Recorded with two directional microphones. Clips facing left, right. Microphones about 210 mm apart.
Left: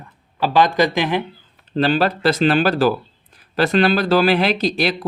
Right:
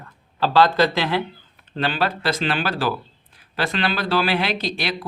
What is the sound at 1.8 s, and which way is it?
Speech, 40° left (ahead or behind).